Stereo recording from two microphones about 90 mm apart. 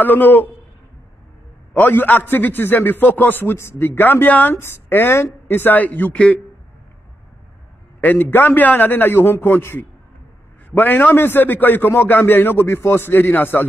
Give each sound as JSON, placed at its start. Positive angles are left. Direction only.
{"t": 0.0, "sound": "a man's voice", "side_deg": 20}
{"t": 1.7, "sound": "a man's voice", "side_deg": 20}
{"t": 8.0, "sound": "a man's voice", "side_deg": 20}